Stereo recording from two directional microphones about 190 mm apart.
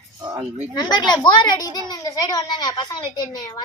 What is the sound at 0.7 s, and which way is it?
A child's voice, 20° left (ahead or behind).